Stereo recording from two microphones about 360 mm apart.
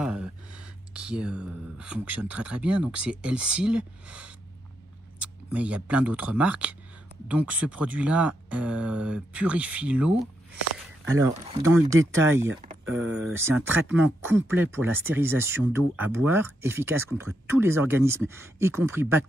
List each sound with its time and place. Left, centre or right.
0.0 s speech: centre
12.8 s speech: right
13.3 s speech: centre